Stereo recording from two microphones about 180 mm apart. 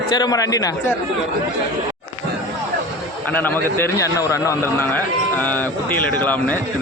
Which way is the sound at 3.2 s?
10° left (ahead or behind).